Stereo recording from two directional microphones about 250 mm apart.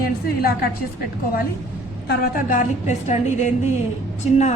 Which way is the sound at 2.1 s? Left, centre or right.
Left.